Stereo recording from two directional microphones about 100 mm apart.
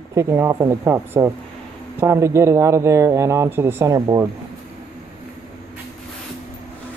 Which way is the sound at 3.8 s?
35° right (ahead or behind).